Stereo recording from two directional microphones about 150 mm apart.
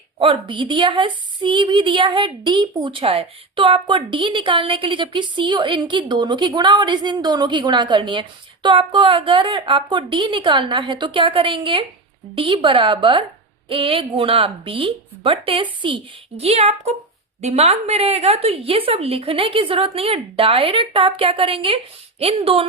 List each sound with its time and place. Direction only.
0.2 s a woman's voice: 35° right (ahead or behind)